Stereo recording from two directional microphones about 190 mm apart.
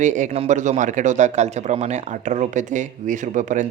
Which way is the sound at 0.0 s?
40° right (ahead or behind).